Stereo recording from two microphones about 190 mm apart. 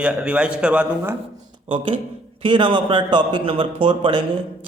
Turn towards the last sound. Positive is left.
turn(degrees=-25)  # may be behind; listen again after turning